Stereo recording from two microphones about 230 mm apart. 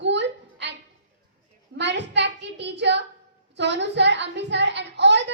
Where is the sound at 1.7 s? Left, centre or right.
Right.